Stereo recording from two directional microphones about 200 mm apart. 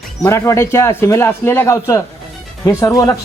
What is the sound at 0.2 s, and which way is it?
A man's voice, 15° left (ahead or behind).